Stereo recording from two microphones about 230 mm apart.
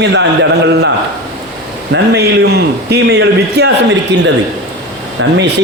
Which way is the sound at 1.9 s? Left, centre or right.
Right.